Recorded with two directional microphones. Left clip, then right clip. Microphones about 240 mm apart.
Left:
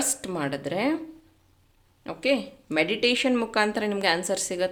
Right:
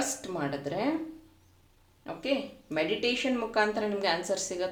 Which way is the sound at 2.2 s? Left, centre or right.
Left.